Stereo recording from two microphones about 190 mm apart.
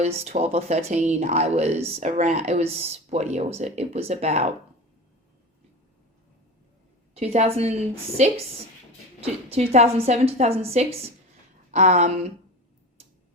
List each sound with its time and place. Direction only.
0.0 s speech: 35° right (ahead or behind)
7.1 s a woman's voice: 35° right (ahead or behind)
9.2 s speech: 30° right (ahead or behind)